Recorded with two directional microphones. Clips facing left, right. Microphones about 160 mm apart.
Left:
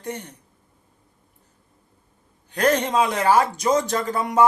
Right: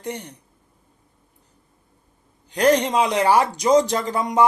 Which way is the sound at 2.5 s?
15° right (ahead or behind).